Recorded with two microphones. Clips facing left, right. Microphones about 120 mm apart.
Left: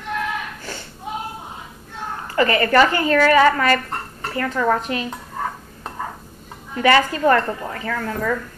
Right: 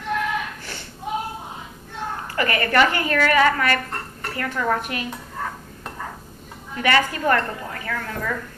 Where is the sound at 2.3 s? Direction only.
25° left (ahead or behind).